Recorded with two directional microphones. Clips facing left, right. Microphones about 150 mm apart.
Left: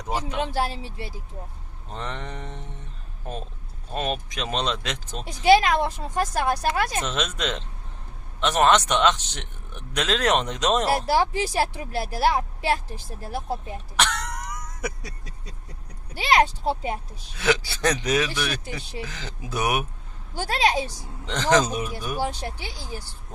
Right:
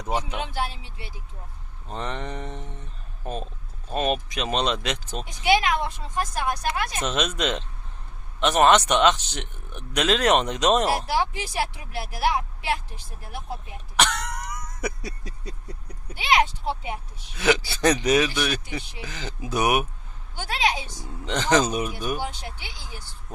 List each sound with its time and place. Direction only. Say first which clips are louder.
0.4 s speech: left 4 dB; 35° left (ahead or behind)
1.9 s speech: right 2 dB; 15° right (ahead or behind)
3.9 s speech: right 3 dB; 15° right (ahead or behind)
5.2 s speech: left 5 dB; 35° left (ahead or behind)
7.0 s speech: right 2 dB; 15° right (ahead or behind)
11.0 s speech: left 4 dB; 40° left (ahead or behind)
13.9 s throat clearing: right 2 dB; 15° right (ahead or behind)
16.1 s speech: left 2 dB; 35° left (ahead or behind)
17.4 s speech: right 2 dB; 15° right (ahead or behind)
20.3 s speech: left 3 dB; 35° left (ahead or behind)
21.2 s speech: even; 15° right (ahead or behind)
22.2 s speech: left 5 dB; 40° left (ahead or behind)